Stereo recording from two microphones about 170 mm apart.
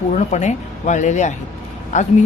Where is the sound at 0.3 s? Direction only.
45° left (ahead or behind).